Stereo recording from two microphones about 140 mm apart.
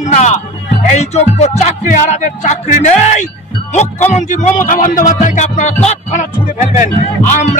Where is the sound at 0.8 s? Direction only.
50° left (ahead or behind).